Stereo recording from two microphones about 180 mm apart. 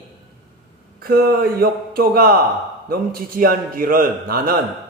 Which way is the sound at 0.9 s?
55° right (ahead or behind).